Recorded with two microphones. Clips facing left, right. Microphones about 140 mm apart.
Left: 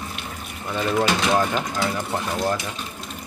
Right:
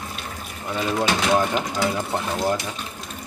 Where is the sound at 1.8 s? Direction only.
15° right (ahead or behind).